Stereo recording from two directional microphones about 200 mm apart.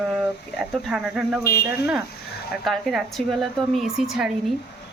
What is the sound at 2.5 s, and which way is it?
Speech, centre (ahead or behind).